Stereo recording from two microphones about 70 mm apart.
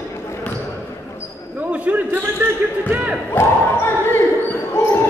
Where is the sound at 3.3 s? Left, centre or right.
Left.